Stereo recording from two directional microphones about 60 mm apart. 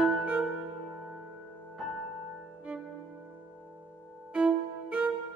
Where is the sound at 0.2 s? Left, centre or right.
Right.